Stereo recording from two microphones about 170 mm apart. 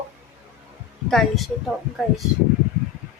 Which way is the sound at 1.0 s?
Centre (ahead or behind).